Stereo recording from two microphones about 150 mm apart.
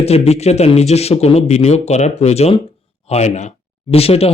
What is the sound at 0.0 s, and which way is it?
Speech, 45° left (ahead or behind).